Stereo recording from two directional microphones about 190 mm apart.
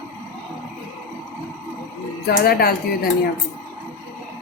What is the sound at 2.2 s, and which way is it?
Speech, 55° left (ahead or behind).